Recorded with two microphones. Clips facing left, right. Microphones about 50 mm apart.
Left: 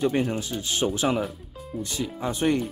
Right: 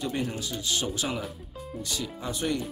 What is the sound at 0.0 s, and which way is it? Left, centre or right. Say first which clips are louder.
Speech: left 7 dB; left.